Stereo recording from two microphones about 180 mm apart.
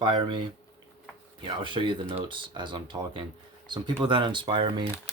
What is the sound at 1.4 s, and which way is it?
Speech, 25° right (ahead or behind).